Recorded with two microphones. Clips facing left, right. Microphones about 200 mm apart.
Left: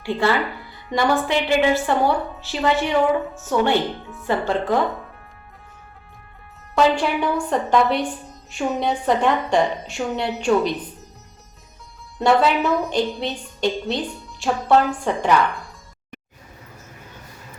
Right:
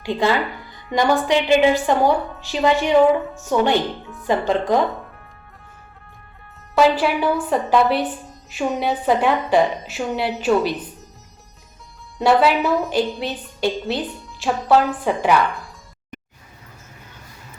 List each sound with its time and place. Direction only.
0.0 s a woman's voice: 15° right (ahead or behind)
4.0 s a woman's voice: centre (ahead or behind)
4.3 s a woman's voice: 15° right (ahead or behind)
6.7 s a woman's voice: 5° right (ahead or behind)
12.2 s a woman's voice: 5° right (ahead or behind)